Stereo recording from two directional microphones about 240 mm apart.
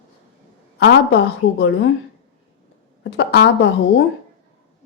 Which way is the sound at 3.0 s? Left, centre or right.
Left.